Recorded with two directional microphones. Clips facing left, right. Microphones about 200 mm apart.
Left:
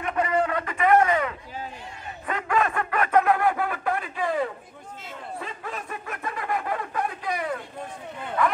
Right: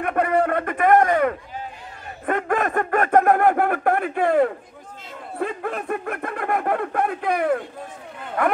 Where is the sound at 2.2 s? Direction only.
50° right (ahead or behind).